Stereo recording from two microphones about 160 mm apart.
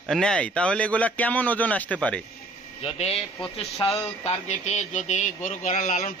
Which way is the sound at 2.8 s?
35° left (ahead or behind).